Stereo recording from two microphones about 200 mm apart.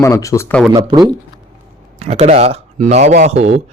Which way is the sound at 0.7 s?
25° right (ahead or behind).